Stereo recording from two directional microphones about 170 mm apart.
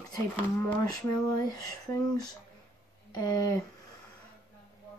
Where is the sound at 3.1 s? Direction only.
20° left (ahead or behind).